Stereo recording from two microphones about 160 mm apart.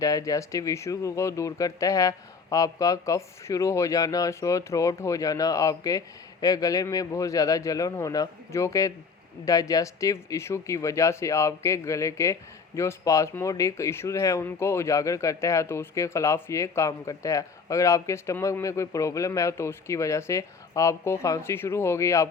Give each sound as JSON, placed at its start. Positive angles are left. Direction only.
{"t": 0.0, "sound": "speech", "side_deg": 20}